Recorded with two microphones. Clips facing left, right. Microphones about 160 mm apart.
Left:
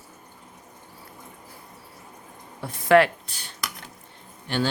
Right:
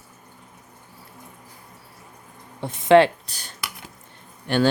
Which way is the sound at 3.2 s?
40° right (ahead or behind).